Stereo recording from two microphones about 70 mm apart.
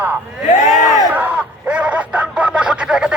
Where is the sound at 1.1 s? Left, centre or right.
Centre.